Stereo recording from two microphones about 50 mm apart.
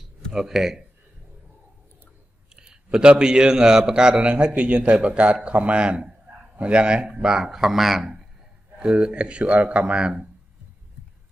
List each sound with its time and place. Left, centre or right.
0.3 s a man's voice: centre
2.5 s a man's voice: centre
8.7 s a man's voice: centre